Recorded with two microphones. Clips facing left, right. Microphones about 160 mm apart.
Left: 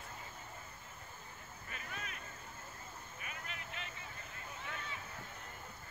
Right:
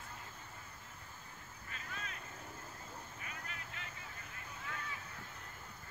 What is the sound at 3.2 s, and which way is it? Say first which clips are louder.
Vehicle: left 1 dB; 20° left (ahead or behind).